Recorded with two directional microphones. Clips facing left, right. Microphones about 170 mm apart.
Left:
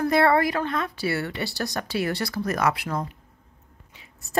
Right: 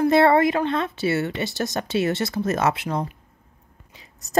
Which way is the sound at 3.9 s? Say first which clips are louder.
Right 2 dB; 35° right (ahead or behind).